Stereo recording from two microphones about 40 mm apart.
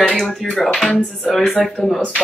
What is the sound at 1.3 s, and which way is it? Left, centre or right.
Speech, left.